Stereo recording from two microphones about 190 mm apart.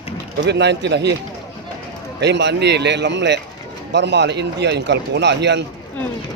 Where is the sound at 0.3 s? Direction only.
65° right (ahead or behind).